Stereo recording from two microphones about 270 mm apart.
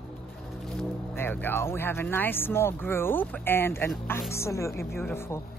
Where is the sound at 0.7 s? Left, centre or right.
Centre.